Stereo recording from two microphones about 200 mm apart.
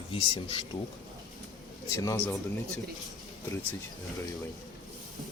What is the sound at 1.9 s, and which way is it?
Speech, 15° left (ahead or behind).